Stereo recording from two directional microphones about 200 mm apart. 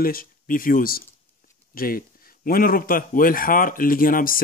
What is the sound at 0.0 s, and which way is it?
A man's voice, 45° left (ahead or behind).